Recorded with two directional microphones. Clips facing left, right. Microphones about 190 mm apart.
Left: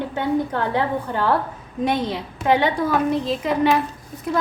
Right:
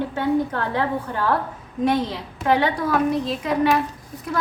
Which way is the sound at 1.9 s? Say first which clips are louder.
Right 1 dB; 20° left (ahead or behind).